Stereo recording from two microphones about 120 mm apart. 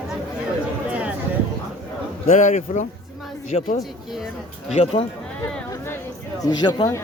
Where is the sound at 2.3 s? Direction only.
90° left.